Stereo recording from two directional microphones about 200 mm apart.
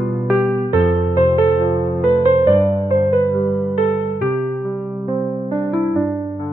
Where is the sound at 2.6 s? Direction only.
15° right (ahead or behind).